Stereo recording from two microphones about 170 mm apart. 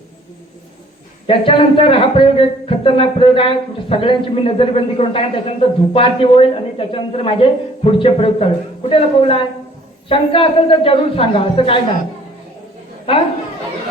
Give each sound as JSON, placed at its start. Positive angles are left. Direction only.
{"t": 1.3, "sound": "speech", "side_deg": 30}
{"t": 13.1, "sound": "speech", "side_deg": 30}